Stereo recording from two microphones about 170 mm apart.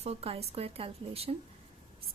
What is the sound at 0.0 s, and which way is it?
Speech, 35° right (ahead or behind).